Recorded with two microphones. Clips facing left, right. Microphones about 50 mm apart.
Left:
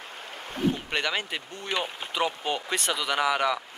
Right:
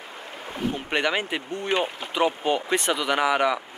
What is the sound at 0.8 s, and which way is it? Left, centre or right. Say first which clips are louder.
Speech: right 4 dB; centre.